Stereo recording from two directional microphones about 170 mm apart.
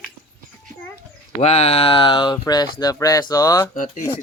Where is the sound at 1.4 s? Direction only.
40° left (ahead or behind); by 3.7 s 20° left (ahead or behind).